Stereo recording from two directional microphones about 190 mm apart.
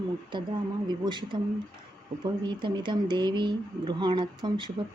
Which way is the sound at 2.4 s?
25° right (ahead or behind).